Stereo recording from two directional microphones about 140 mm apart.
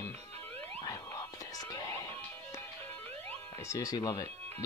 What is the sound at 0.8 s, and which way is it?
Whispering, 25° left (ahead or behind).